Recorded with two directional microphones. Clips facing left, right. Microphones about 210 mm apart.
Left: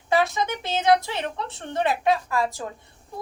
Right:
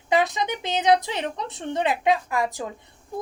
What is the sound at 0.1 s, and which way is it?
A woman's voice, 15° right (ahead or behind).